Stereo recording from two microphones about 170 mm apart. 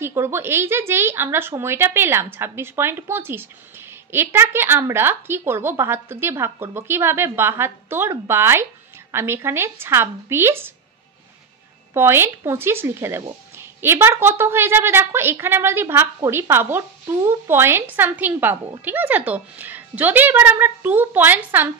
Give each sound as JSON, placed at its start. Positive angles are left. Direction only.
{"t": 0.0, "sound": "speech", "side_deg": -15}
{"t": 11.9, "sound": "speech", "side_deg": -15}